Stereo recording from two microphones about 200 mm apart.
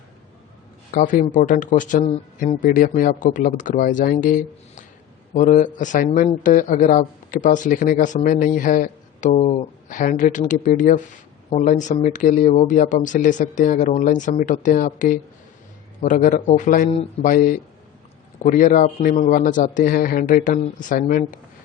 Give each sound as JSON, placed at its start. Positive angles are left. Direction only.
{"t": 0.9, "sound": "a man's voice", "side_deg": 45}